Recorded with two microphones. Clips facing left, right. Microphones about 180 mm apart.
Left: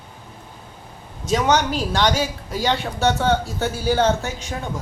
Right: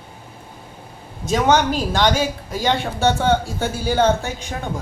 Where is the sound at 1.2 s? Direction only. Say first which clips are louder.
Right 2 dB; 50° right (ahead or behind).